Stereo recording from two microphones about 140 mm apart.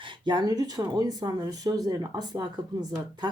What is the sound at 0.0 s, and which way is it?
Speech, 30° right (ahead or behind).